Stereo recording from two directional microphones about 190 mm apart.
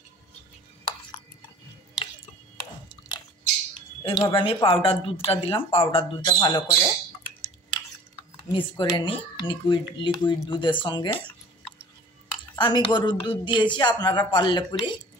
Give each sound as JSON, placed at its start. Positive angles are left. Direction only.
{"t": 4.0, "sound": "speech", "side_deg": 25}
{"t": 8.5, "sound": "speech", "side_deg": 25}
{"t": 12.5, "sound": "speech", "side_deg": 25}